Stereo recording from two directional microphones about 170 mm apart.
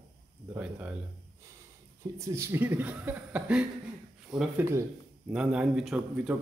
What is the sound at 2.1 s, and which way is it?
A man's voice, 15° right (ahead or behind).